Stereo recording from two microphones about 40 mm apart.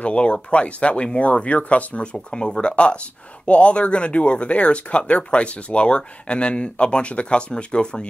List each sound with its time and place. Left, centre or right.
0.0 s speech: left
2.1 s speech: centre